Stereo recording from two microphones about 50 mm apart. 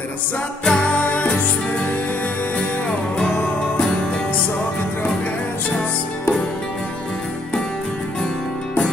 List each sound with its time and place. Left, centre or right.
0.7 s music: left